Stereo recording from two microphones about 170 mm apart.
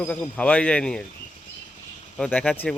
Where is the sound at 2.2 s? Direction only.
5° left (ahead or behind).